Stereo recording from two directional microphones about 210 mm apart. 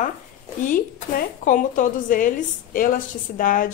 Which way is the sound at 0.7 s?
40° left (ahead or behind).